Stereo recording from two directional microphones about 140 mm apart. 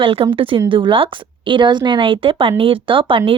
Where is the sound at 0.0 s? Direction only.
40° right (ahead or behind).